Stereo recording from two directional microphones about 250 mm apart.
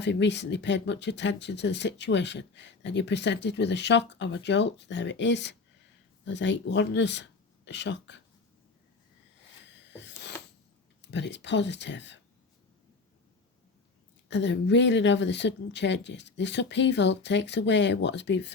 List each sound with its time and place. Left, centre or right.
0.0 s speech: left
9.7 s a sound: left
11.0 s speech: left
14.3 s speech: left